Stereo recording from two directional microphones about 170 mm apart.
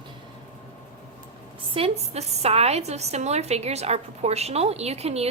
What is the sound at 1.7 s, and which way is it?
A woman's voice, 40° right (ahead or behind).